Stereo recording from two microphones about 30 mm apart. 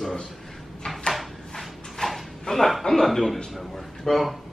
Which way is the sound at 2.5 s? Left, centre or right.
Left.